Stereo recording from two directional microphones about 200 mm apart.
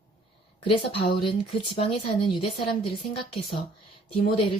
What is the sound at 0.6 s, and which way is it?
Speech, 25° left (ahead or behind).